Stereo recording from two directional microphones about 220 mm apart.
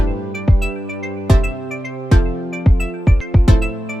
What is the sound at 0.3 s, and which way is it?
Music, centre (ahead or behind).